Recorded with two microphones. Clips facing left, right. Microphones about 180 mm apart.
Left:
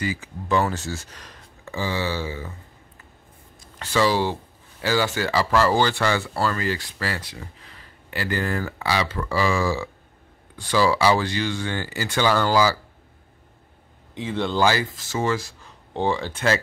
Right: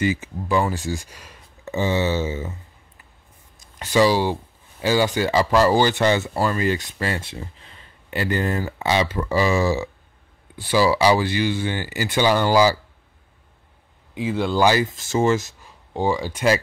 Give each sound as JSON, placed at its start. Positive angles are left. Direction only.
{"t": 0.0, "sound": "speech", "side_deg": -20}
{"t": 1.6, "sound": "speech", "side_deg": -20}
{"t": 3.8, "sound": "speech", "side_deg": -15}
{"t": 14.1, "sound": "speech", "side_deg": -10}
{"t": 15.9, "sound": "speech", "side_deg": -10}